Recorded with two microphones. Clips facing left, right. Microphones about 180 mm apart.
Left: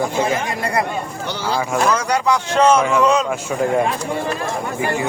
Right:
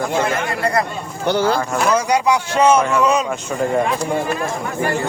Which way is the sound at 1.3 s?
50° right (ahead or behind).